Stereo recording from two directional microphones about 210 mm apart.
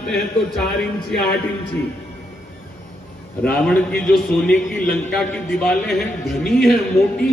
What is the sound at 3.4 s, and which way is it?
A man's voice, 5° left (ahead or behind).